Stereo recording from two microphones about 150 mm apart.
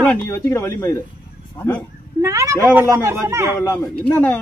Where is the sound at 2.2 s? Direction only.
20° right (ahead or behind).